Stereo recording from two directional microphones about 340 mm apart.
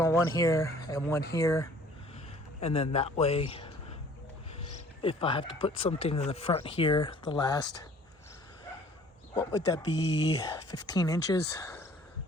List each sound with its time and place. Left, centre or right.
0.0 s speech: centre
5.0 s speech: centre
9.3 s speech: centre